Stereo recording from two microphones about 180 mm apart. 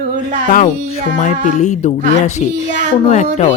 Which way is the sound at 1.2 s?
45° left (ahead or behind).